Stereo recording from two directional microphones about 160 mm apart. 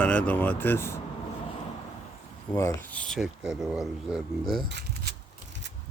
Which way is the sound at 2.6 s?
20° left (ahead or behind).